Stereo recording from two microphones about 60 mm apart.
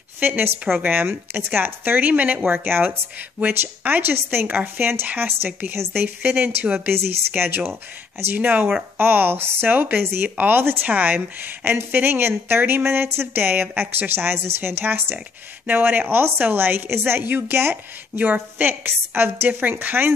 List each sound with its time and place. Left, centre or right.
0.2 s speech: right